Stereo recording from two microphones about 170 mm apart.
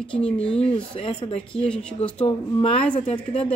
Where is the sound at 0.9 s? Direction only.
30° left (ahead or behind).